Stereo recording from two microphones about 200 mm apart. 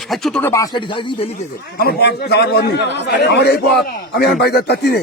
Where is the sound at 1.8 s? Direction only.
50° left (ahead or behind).